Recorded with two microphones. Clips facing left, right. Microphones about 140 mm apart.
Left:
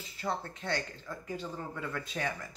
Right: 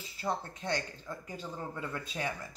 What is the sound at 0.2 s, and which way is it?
Speech, 15° right (ahead or behind).